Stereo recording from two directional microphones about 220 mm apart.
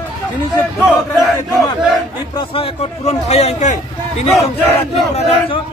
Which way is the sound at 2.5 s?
25° left (ahead or behind).